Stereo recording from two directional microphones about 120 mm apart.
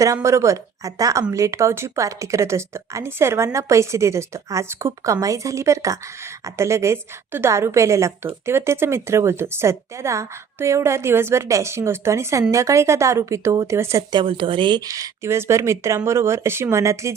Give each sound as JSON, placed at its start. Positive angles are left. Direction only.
{"t": 0.0, "sound": "a woman's voice", "side_deg": -25}
{"t": 14.1, "sound": "speech", "side_deg": -45}
{"t": 14.8, "sound": "a woman's voice", "side_deg": -30}